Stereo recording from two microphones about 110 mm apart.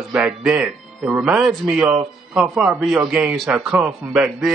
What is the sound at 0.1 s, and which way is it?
Speech, 5° right (ahead or behind).